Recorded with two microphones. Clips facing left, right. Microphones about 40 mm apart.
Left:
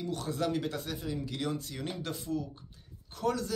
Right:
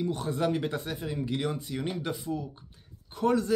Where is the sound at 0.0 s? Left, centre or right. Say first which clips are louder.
Right 4 dB; right.